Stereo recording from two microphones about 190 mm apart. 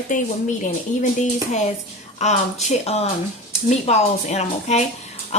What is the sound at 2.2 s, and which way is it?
A woman's voice, 35° left (ahead or behind).